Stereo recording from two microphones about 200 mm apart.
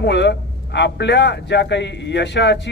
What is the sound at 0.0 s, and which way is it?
A man's voice, 60° left (ahead or behind).